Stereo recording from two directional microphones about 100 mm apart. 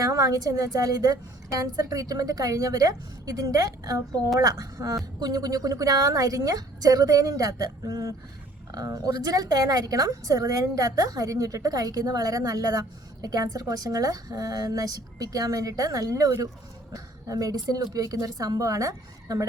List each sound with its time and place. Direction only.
0.0 s a woman's voice: 35° right (ahead or behind)